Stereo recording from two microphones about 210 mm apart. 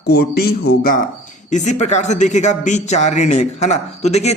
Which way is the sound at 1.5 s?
35° left (ahead or behind).